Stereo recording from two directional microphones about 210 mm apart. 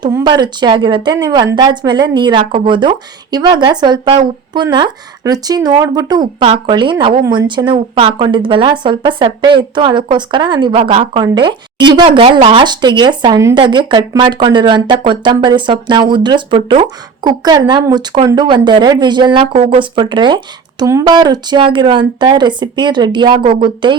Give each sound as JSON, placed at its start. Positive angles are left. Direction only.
{"t": 0.0, "sound": "speech", "side_deg": -20}